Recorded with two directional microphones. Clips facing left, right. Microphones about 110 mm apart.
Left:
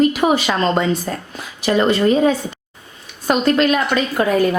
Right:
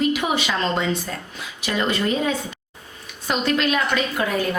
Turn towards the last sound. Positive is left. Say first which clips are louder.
# left 7 dB
turn(degrees=45)  # may be behind; listen again after turning